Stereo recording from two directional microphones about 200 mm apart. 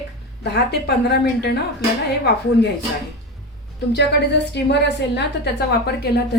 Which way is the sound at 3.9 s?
60° left (ahead or behind).